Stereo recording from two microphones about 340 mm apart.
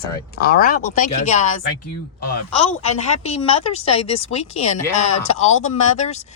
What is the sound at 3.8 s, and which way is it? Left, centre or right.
Speech, left.